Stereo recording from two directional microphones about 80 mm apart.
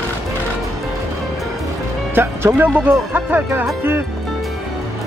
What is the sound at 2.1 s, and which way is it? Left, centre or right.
Speech, right.